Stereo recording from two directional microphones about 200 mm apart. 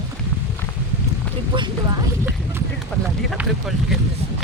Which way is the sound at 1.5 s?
20° right (ahead or behind).